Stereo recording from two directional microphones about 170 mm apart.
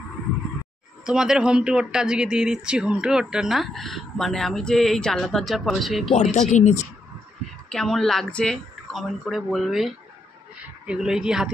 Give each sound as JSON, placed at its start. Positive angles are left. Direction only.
{"t": 1.0, "sound": "speech", "side_deg": -5}
{"t": 6.5, "sound": "speech", "side_deg": 45}
{"t": 7.7, "sound": "speech", "side_deg": 0}